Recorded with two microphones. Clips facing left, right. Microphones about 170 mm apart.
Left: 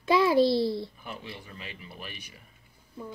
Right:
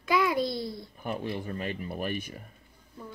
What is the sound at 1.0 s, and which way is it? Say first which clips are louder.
Speech: right 8 dB; 50° right (ahead or behind).